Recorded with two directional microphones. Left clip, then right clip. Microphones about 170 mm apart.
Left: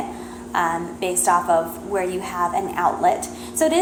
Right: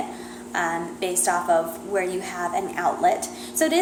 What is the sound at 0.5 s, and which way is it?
A woman's voice, 35° right (ahead or behind).